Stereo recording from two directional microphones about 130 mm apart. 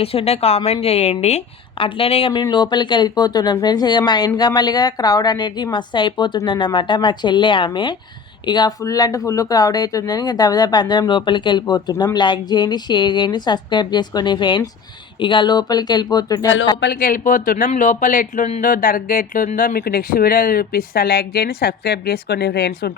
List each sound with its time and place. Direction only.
0.0 s a woman's voice: 50° left (ahead or behind)
1.8 s a woman's voice: 45° left (ahead or behind)
2.4 s speech: 35° left (ahead or behind)
17.0 s speech: 90° left